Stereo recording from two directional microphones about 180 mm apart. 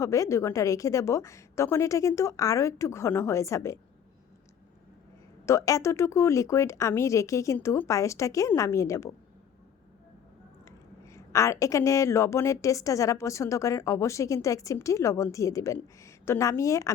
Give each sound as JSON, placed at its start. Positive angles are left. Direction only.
{"t": 0.0, "sound": "a woman's voice", "side_deg": 15}
{"t": 5.5, "sound": "a woman's voice", "side_deg": 15}
{"t": 10.7, "sound": "a woman's voice", "side_deg": 15}